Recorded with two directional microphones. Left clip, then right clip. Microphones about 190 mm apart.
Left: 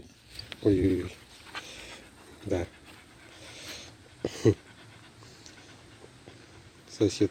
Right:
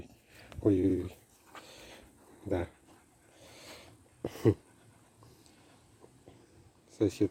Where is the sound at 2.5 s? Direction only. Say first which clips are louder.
Left 3 dB; 10° right (ahead or behind).